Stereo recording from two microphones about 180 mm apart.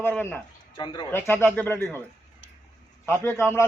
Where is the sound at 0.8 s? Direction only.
25° left (ahead or behind).